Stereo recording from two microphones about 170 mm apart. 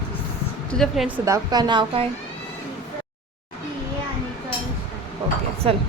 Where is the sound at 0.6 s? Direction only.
5° left (ahead or behind).